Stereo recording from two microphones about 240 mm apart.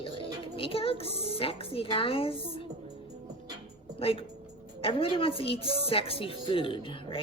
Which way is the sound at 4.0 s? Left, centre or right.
Left.